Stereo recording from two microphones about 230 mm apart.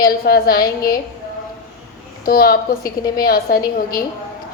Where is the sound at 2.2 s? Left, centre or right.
Left.